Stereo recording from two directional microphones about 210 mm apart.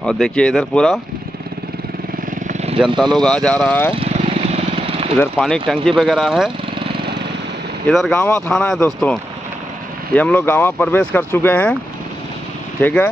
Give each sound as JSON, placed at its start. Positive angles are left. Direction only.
{"t": 0.0, "sound": "speech", "side_deg": 5}
{"t": 2.4, "sound": "vehicle", "side_deg": -30}
{"t": 3.0, "sound": "speech", "side_deg": 0}
{"t": 3.9, "sound": "vehicle", "side_deg": -30}
{"t": 5.1, "sound": "speech", "side_deg": 5}
{"t": 7.9, "sound": "speech", "side_deg": 5}
{"t": 12.8, "sound": "speech", "side_deg": 10}